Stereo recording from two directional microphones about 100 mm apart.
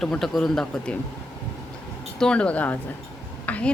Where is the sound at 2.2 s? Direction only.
10° left (ahead or behind).